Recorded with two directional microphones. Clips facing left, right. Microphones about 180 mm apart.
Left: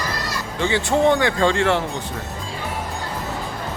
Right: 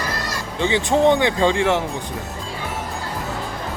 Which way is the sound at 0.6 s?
20° right (ahead or behind).